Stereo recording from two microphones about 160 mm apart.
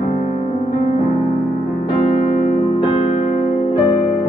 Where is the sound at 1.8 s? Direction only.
30° left (ahead or behind).